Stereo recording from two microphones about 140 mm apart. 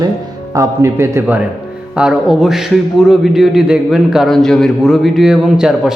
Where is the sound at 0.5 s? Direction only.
20° right (ahead or behind).